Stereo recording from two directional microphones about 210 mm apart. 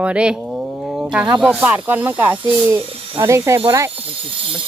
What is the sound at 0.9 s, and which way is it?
Wild animals, 5° right (ahead or behind).